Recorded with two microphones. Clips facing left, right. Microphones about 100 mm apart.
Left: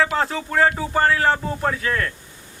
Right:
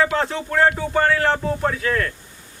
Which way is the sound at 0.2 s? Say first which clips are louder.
Even; centre (ahead or behind).